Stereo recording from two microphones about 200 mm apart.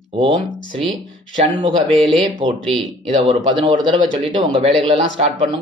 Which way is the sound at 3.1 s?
25° right (ahead or behind).